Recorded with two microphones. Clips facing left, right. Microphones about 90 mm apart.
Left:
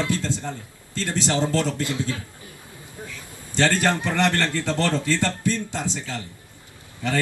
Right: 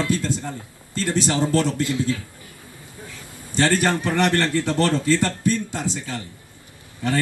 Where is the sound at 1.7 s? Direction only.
20° left (ahead or behind).